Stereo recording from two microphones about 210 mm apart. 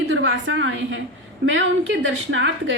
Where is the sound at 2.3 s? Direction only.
60° right (ahead or behind).